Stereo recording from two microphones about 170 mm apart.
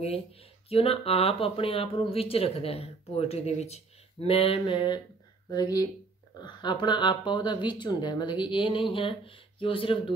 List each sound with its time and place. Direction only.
0.7 s speech: 35° left (ahead or behind)